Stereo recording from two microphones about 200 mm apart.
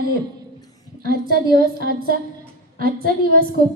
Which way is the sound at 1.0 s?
50° right (ahead or behind).